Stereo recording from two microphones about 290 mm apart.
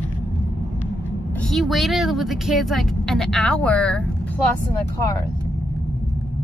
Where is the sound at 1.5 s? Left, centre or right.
Centre.